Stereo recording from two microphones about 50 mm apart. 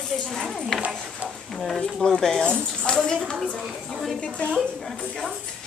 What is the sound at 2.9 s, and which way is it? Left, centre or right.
Speech, centre.